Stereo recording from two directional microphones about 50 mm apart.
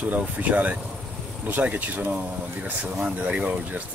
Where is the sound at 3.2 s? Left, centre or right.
Right.